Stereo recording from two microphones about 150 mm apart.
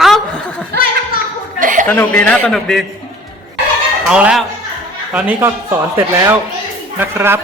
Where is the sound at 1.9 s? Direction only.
10° left (ahead or behind).